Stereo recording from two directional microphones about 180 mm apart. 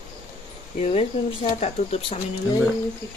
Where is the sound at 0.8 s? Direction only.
35° left (ahead or behind).